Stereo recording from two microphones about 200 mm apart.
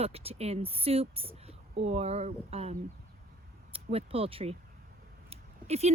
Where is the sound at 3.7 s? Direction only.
30° right (ahead or behind).